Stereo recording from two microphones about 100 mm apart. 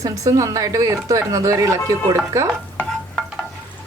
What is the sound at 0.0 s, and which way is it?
A woman's voice, 35° right (ahead or behind).